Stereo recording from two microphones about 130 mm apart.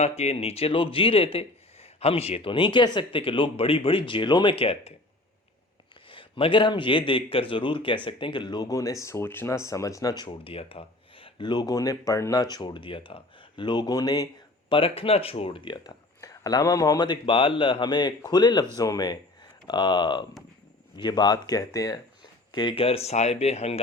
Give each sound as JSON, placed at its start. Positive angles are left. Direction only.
{"t": 0.0, "sound": "speech", "side_deg": 55}
{"t": 6.1, "sound": "speech", "side_deg": 40}
{"t": 14.7, "sound": "speech", "side_deg": 45}
{"t": 22.5, "sound": "speech", "side_deg": 40}